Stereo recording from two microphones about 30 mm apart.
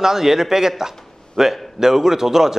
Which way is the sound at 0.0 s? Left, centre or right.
Centre.